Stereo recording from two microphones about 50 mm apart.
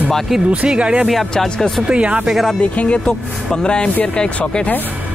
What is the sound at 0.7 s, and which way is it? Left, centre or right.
Speech, centre.